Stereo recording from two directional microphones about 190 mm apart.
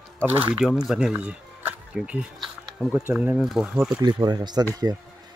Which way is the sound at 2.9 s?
10° right (ahead or behind).